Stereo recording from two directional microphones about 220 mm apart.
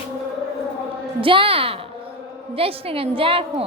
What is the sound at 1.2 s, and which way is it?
A woman's voice, 25° right (ahead or behind).